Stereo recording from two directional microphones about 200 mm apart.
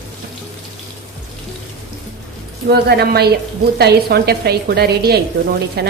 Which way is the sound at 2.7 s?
55° right (ahead or behind).